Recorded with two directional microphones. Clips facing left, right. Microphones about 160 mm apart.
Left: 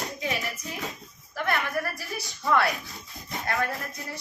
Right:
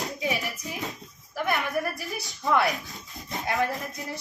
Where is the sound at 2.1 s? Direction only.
20° right (ahead or behind).